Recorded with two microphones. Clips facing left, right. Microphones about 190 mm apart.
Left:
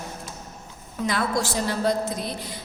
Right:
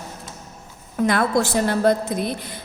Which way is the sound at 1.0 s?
55° right (ahead or behind).